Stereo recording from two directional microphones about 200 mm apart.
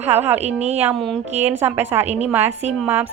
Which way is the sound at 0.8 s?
10° right (ahead or behind).